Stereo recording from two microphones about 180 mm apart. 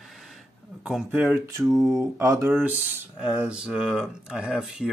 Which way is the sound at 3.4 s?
5° right (ahead or behind).